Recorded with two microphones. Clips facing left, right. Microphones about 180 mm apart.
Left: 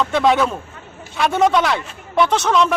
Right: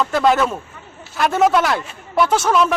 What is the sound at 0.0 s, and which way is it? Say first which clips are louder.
Speech: even; centre (ahead or behind).